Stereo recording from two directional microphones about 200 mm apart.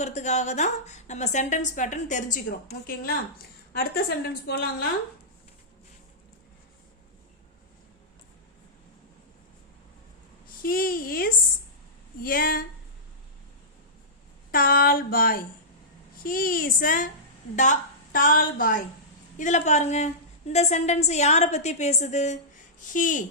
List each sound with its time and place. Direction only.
0.0 s a woman's voice: 35° left (ahead or behind); by 4.9 s 50° left (ahead or behind)
10.6 s a woman's voice: 45° left (ahead or behind)
14.5 s a woman's voice: 45° left (ahead or behind)